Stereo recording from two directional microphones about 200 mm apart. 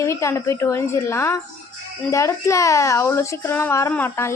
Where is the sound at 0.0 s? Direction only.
15° left (ahead or behind).